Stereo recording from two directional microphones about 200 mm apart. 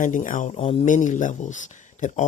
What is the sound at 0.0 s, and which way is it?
Speech, 40° left (ahead or behind).